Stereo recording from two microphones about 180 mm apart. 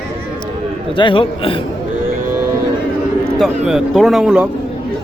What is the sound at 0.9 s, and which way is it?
Speech, 30° left (ahead or behind).